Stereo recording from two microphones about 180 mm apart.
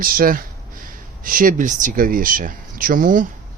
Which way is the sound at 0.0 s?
50° right (ahead or behind).